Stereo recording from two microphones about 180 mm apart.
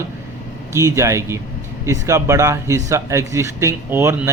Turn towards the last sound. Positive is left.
turn(degrees=-15)  # may be behind; listen again after turning